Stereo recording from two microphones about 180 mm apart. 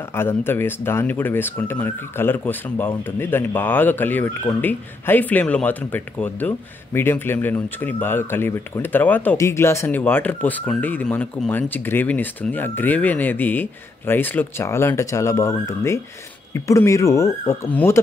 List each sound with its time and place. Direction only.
0.1 s speech: 15° left (ahead or behind)